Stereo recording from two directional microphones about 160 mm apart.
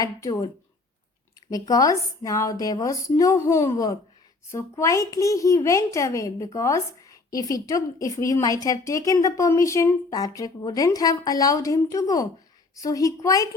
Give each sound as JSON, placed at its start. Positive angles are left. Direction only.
{"t": 0.0, "sound": "speech", "side_deg": 20}